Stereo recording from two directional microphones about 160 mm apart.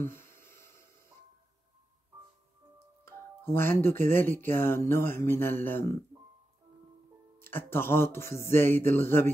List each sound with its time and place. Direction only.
0.0 s a sound: 15° left (ahead or behind)
3.1 s speech: 15° left (ahead or behind)
7.3 s speech: 15° left (ahead or behind)